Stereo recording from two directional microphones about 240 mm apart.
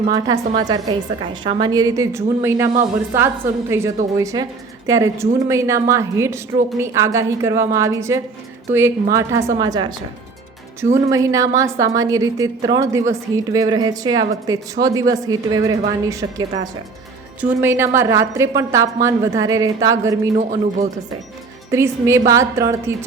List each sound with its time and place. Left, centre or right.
0.1 s a woman's voice: centre
10.9 s a woman's voice: centre
20.4 s speech: right
21.7 s a woman's voice: centre